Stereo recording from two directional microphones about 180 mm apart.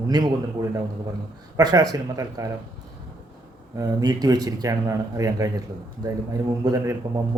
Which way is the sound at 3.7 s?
20° right (ahead or behind).